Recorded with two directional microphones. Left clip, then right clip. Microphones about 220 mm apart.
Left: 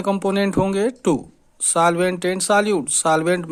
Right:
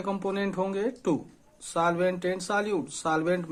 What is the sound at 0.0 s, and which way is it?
Speech, 40° left (ahead or behind).